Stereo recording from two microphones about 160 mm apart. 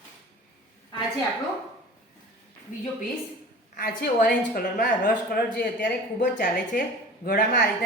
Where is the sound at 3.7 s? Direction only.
75° left (ahead or behind).